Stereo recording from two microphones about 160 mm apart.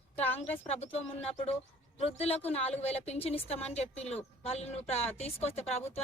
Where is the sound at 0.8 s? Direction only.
40° left (ahead or behind).